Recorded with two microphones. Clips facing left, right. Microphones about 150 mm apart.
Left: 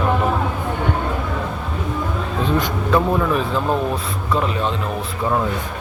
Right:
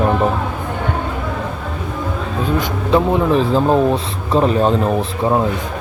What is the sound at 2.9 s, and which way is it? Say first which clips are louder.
Speech: right 4 dB; 20° right (ahead or behind).